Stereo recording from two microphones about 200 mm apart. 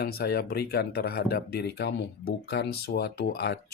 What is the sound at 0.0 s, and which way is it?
Speech, 50° left (ahead or behind).